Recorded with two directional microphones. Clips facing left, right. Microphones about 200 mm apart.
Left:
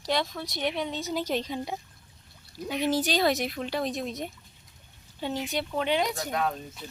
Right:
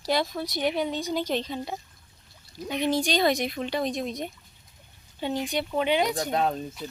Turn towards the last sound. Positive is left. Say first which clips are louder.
# right 3 dB
turn(degrees=-30)  # may be behind; listen again after turning